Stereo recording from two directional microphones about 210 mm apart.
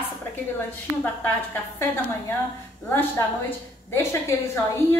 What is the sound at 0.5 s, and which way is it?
Speech, 10° left (ahead or behind).